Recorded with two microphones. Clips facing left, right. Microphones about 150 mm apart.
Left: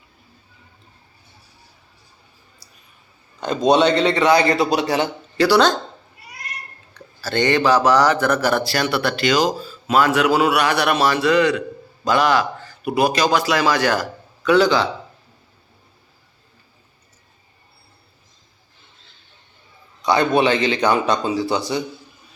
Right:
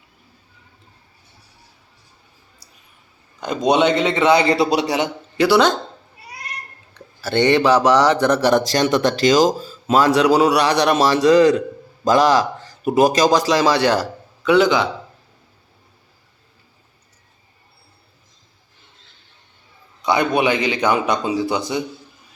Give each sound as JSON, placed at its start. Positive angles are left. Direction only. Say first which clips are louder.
{"t": 3.4, "sound": "speech", "louder": "left 1 dB", "side_deg": -15}
{"t": 7.2, "sound": "a man's voice", "louder": "right 3 dB", "side_deg": -25}
{"t": 14.5, "sound": "speech", "louder": "right 1 dB", "side_deg": -20}
{"t": 20.4, "sound": "a man's voice", "louder": "left 1 dB", "side_deg": -15}